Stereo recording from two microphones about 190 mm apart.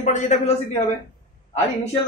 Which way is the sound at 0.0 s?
40° left (ahead or behind).